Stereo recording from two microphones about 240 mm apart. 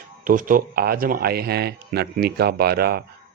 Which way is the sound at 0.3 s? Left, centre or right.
Right.